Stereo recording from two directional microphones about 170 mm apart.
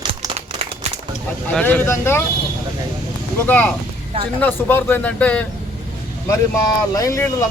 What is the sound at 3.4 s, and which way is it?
Speech, 10° left (ahead or behind).